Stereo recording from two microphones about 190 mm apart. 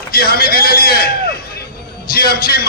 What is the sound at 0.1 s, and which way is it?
A man's voice, 55° left (ahead or behind).